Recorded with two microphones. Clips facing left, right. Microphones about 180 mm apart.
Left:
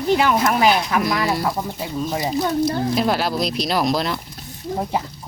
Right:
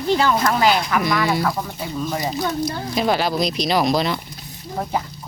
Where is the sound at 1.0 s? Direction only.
Centre (ahead or behind).